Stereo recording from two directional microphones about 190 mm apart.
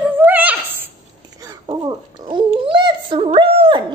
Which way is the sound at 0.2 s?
10° right (ahead or behind).